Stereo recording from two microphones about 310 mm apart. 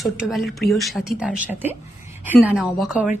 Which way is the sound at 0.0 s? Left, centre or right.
Centre.